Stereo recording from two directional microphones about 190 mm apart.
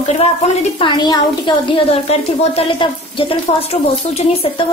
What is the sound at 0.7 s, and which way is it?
Speech, 25° left (ahead or behind).